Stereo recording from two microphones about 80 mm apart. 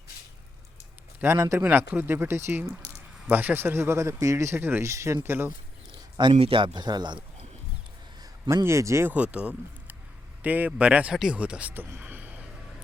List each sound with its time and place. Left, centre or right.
1.2 s speech: right
6.1 s a man's voice: right
8.4 s speech: right
9.0 s speech: centre
11.7 s a sound: right